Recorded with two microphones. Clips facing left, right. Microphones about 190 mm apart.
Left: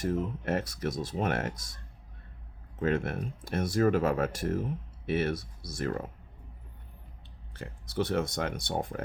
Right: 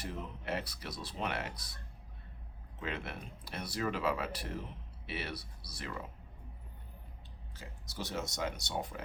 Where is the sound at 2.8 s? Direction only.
50° left (ahead or behind).